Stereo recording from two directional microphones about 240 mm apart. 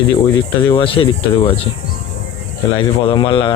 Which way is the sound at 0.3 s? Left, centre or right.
Centre.